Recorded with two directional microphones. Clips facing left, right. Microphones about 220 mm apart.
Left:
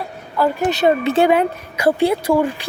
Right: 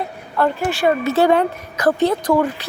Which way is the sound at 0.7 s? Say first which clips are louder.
Left 2 dB; 25° left (ahead or behind).